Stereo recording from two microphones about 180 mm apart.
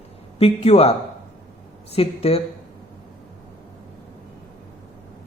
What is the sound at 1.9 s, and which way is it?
Speech, 35° left (ahead or behind).